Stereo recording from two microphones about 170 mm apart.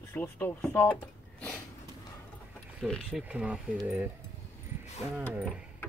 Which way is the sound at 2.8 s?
5° right (ahead or behind).